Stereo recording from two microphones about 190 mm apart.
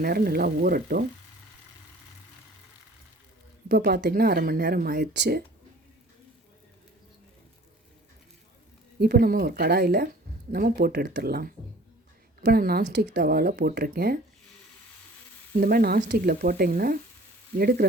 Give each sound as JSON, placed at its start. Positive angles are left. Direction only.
{"t": 0.0, "sound": "speech", "side_deg": -55}
{"t": 3.7, "sound": "speech", "side_deg": -55}
{"t": 9.0, "sound": "speech", "side_deg": -55}
{"t": 15.5, "sound": "speech", "side_deg": -50}